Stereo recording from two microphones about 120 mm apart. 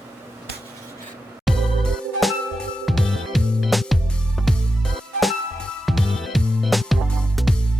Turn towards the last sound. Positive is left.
turn(degrees=0)  # may be behind; listen again after turning